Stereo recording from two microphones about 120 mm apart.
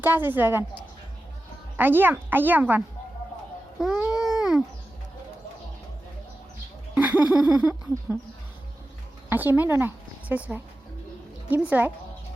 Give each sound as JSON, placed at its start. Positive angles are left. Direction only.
{"t": 0.0, "sound": "speech", "side_deg": -15}
{"t": 1.7, "sound": "speech", "side_deg": -15}
{"t": 4.2, "sound": "a sound", "side_deg": -5}
{"t": 6.9, "sound": "speech", "side_deg": -15}
{"t": 9.3, "sound": "speech", "side_deg": -15}
{"t": 11.4, "sound": "speech", "side_deg": -15}